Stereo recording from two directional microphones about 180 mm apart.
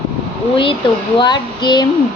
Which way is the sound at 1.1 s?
25° left (ahead or behind).